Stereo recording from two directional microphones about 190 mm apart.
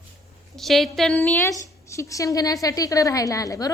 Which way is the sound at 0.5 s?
Centre (ahead or behind).